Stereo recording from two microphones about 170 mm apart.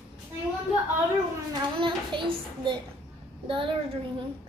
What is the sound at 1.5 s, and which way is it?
A child's voice, 25° right (ahead or behind).